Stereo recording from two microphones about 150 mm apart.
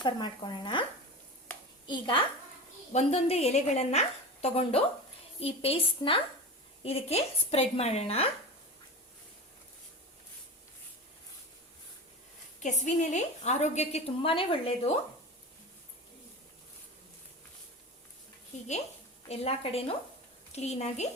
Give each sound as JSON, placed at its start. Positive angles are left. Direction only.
{"t": 0.0, "sound": "a woman's voice", "side_deg": 30}
{"t": 1.9, "sound": "a woman's voice", "side_deg": 30}
{"t": 2.9, "sound": "a woman's voice", "side_deg": 45}
{"t": 12.6, "sound": "a woman's voice", "side_deg": 55}
{"t": 19.3, "sound": "a woman's voice", "side_deg": 40}